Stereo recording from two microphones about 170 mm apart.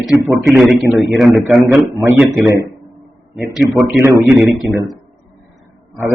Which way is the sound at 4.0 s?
15° right (ahead or behind).